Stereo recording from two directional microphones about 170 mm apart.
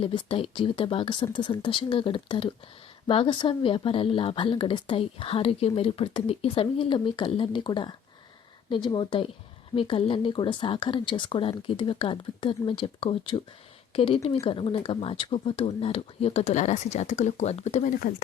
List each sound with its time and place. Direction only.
0.0 s speech: 30° left (ahead or behind)